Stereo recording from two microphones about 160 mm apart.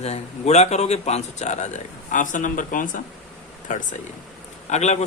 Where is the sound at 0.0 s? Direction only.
45° left (ahead or behind).